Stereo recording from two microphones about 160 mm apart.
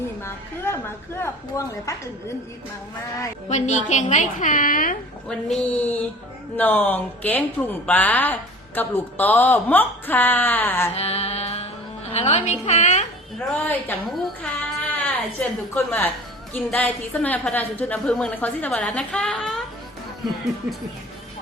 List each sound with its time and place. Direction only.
0.2 s speech: 15° left (ahead or behind)
3.5 s a woman's voice: 50° left (ahead or behind)
5.3 s speech: 10° left (ahead or behind)
10.9 s music: 40° left (ahead or behind)
14.8 s a woman's voice: 10° left (ahead or behind)